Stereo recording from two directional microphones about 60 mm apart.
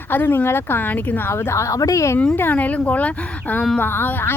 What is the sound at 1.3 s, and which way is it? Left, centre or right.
Speech, left.